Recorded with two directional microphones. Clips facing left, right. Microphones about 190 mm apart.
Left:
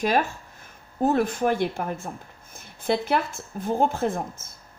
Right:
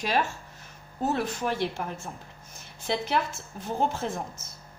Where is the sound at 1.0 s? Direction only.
50° left (ahead or behind).